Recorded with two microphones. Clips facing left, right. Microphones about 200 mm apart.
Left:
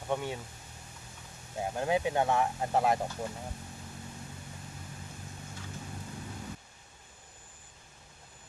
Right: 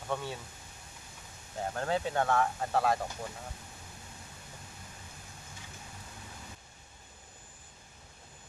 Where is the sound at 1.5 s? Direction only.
15° left (ahead or behind).